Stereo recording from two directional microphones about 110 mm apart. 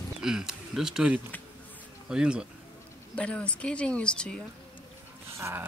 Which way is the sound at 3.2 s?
10° left (ahead or behind).